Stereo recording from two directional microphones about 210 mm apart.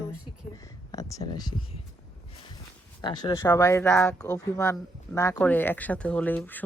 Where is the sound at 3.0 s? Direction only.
20° left (ahead or behind).